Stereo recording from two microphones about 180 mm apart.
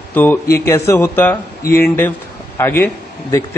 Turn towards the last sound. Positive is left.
turn(degrees=15)  # may be behind; listen again after turning